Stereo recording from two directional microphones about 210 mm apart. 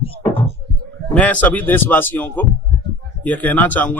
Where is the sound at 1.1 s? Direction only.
5° left (ahead or behind).